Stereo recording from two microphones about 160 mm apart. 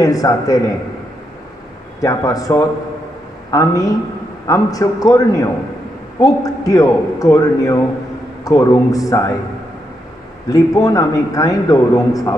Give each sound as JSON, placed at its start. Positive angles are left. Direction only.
{"t": 0.0, "sound": "a man's voice", "side_deg": 20}
{"t": 2.0, "sound": "a man's voice", "side_deg": 20}
{"t": 10.5, "sound": "a man's voice", "side_deg": 20}